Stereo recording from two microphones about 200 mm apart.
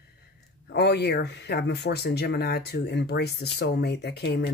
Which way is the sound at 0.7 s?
55° left (ahead or behind).